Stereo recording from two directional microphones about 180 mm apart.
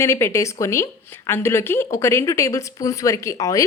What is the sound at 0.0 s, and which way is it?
A woman's voice, 15° left (ahead or behind).